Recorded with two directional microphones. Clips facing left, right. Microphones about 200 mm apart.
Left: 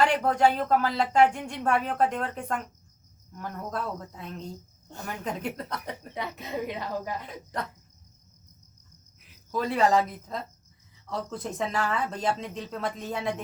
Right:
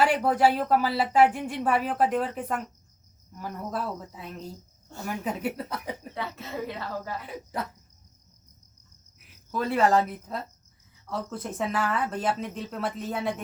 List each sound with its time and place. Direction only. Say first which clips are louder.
0.0 s a woman's voice: right 1 dB; 5° right (ahead or behind)
6.1 s speech: left 3 dB; 15° left (ahead or behind)
7.5 s a woman's voice: right 1 dB; 5° right (ahead or behind)
9.5 s speech: right 1 dB; 5° right (ahead or behind)